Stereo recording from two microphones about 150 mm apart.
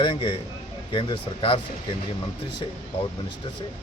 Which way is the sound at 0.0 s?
35° left (ahead or behind).